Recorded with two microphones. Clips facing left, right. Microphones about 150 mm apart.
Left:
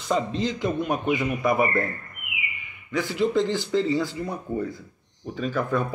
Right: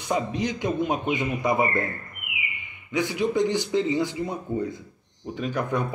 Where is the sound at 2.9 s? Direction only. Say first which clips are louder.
Left 1 dB; 15° right (ahead or behind).